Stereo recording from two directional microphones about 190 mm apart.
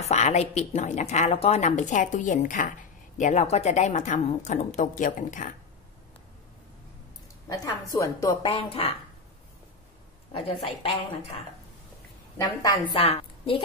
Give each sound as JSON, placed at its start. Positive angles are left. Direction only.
{"t": 0.0, "sound": "speech", "side_deg": 35}
{"t": 7.4, "sound": "speech", "side_deg": 15}
{"t": 10.3, "sound": "speech", "side_deg": 30}
{"t": 12.6, "sound": "a woman's voice", "side_deg": 25}